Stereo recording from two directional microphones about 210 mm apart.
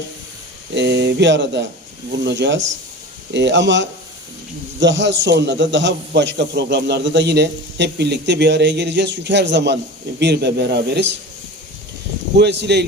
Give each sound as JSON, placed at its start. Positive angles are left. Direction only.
{"t": 0.7, "sound": "a man's voice", "side_deg": -55}
{"t": 12.4, "sound": "speech", "side_deg": -55}